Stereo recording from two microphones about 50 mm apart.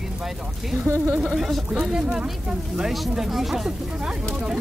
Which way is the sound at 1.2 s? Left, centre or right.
Centre.